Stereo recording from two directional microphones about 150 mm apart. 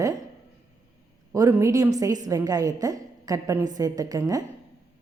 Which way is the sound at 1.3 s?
20° right (ahead or behind).